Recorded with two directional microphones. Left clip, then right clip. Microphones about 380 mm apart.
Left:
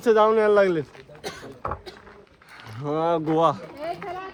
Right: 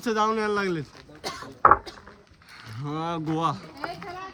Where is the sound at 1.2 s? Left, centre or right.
Centre.